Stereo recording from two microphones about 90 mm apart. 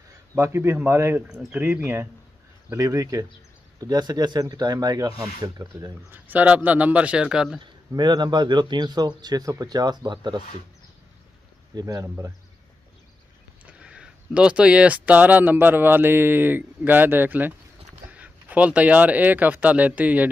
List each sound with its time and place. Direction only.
0.3 s speech: 30° right (ahead or behind)
2.7 s a man's voice: 40° right (ahead or behind)
6.0 s speech: 20° right (ahead or behind)
7.9 s a man's voice: 55° right (ahead or behind)
11.8 s speech: 35° right (ahead or behind)
13.7 s speech: 10° right (ahead or behind)